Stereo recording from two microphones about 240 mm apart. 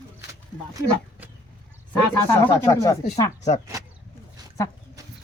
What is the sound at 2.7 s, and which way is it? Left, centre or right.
Speech, centre.